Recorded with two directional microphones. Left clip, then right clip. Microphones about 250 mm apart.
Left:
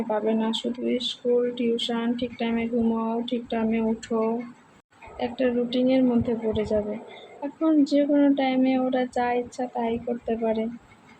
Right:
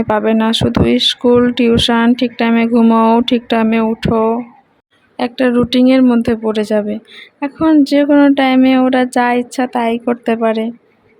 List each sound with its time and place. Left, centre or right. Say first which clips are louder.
0.1 s speech: right 12 dB; right